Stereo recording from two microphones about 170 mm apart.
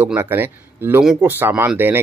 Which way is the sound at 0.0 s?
10° right (ahead or behind).